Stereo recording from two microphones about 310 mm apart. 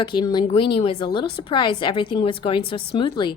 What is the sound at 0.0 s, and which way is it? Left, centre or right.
A woman's voice, centre.